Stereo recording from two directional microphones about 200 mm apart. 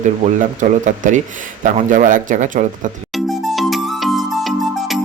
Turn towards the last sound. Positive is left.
turn(degrees=0)  # may be behind; listen again after turning